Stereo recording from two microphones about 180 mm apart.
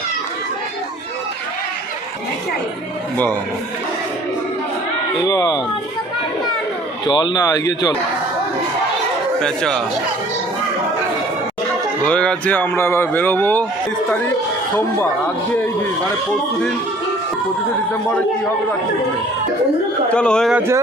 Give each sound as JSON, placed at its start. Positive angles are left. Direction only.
{"t": 5.2, "sound": "speech", "side_deg": 20}
{"t": 7.1, "sound": "speech", "side_deg": 25}
{"t": 9.4, "sound": "speech", "side_deg": 5}
{"t": 12.0, "sound": "a man's voice", "side_deg": 5}
{"t": 20.1, "sound": "speech", "side_deg": 5}
{"t": 20.6, "sound": "speech", "side_deg": -15}